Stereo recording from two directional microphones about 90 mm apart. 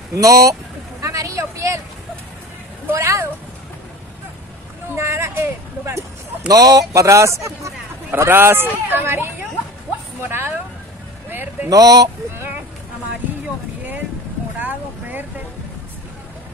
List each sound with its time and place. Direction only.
0.1 s a man's voice: 40° right (ahead or behind)
1.0 s vehicle: 40° right (ahead or behind)
2.9 s a man's voice: 30° right (ahead or behind)
4.9 s a man's voice: 30° right (ahead or behind)
6.4 s a man's voice: 45° right (ahead or behind); by 10.5 s 25° right (ahead or behind)
11.2 s vehicle: 20° right (ahead or behind)
11.7 s a man's voice: 45° right (ahead or behind)
14.6 s vehicle: 20° right (ahead or behind)